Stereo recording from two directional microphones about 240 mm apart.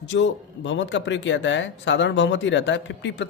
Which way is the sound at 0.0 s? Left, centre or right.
Left.